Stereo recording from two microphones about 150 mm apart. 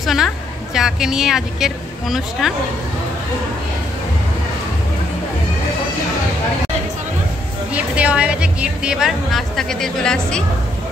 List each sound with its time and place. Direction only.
0.0 s a woman's voice: centre (ahead or behind)
7.7 s a woman's voice: 10° right (ahead or behind)